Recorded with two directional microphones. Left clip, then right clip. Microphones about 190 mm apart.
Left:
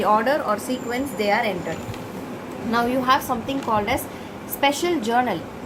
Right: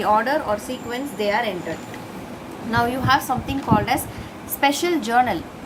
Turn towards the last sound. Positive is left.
turn(degrees=-15)  # may be behind; listen again after turning